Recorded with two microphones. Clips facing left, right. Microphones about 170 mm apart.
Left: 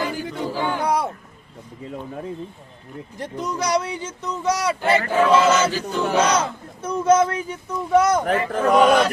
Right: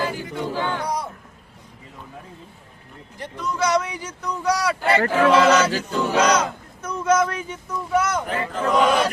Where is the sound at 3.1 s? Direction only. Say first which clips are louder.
Even; 45° left (ahead or behind); by 4.9 s 20° left (ahead or behind).